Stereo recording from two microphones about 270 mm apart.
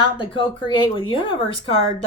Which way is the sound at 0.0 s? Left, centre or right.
Centre.